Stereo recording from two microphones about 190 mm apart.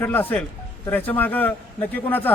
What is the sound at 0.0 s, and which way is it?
Speech, 10° left (ahead or behind).